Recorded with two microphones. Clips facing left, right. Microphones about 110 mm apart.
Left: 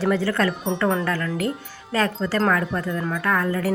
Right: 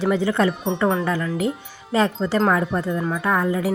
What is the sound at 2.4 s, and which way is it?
Speech, 10° right (ahead or behind).